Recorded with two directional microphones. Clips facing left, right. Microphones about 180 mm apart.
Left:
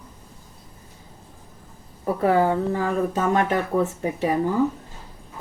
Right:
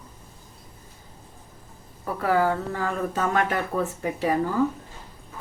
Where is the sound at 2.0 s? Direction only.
25° left (ahead or behind).